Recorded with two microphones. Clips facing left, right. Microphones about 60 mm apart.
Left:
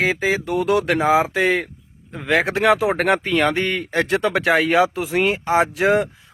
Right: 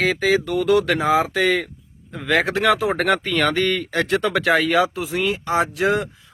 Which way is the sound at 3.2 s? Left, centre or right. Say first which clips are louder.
Left 1 dB; centre.